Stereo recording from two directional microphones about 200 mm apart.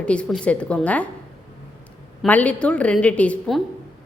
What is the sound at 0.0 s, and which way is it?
A woman's voice, 5° left (ahead or behind).